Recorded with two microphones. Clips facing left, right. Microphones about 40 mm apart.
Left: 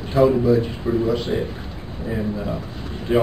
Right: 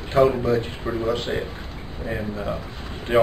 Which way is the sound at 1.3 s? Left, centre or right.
Right.